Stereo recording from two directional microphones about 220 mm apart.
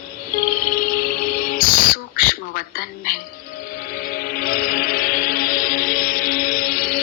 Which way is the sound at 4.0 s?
40° left (ahead or behind).